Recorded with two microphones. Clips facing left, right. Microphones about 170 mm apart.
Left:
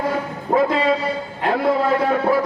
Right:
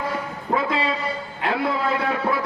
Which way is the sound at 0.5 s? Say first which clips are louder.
Left 6 dB; 45° left (ahead or behind).